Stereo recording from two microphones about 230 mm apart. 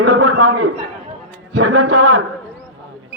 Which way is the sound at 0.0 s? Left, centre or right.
Right.